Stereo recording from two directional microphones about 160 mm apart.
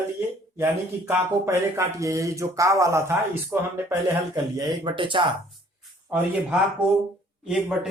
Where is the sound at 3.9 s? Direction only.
25° right (ahead or behind).